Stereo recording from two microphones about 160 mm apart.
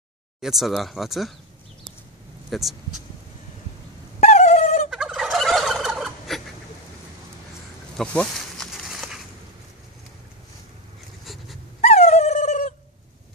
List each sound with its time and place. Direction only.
0.4 s speech: centre (ahead or behind)
2.5 s speech: centre (ahead or behind)
4.2 s dog: 45° left (ahead or behind)
4.9 s gobble: 5° right (ahead or behind)
8.0 s snake: 5° left (ahead or behind)
11.8 s dog: 45° left (ahead or behind)